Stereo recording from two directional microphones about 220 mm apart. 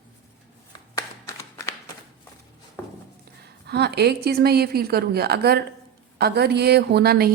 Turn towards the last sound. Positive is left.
turn(degrees=-45)  # may be behind; listen again after turning